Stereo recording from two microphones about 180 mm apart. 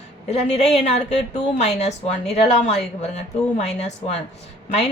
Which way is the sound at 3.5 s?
40° left (ahead or behind).